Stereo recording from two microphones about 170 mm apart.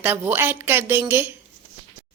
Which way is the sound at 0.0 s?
10° right (ahead or behind).